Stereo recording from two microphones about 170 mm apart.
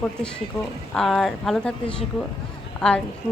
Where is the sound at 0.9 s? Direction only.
Centre (ahead or behind).